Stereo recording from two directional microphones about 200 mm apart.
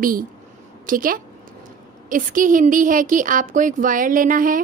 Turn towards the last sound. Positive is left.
turn(degrees=-45)  # may be behind; listen again after turning